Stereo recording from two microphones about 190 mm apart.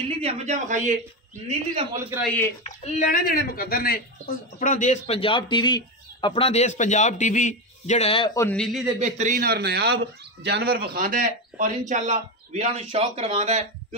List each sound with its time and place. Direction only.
0.1 s speech: 35° right (ahead or behind)
2.0 s a man's voice: 10° right (ahead or behind)
2.2 s speech: 10° left (ahead or behind)
2.6 s speech: 35° left (ahead or behind)
8.4 s speech: 5° left (ahead or behind)
9.0 s speech: 40° right (ahead or behind)